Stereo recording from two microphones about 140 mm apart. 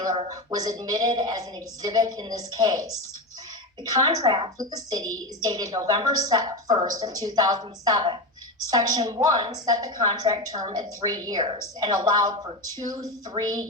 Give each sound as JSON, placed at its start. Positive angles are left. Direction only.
{"t": 0.0, "sound": "a woman's voice", "side_deg": -30}